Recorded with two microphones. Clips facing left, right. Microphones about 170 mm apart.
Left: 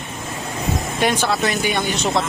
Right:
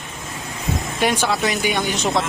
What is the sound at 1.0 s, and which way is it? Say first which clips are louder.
Speech: even; 10° right (ahead or behind).